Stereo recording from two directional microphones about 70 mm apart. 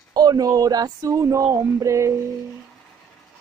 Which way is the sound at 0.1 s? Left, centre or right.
Right.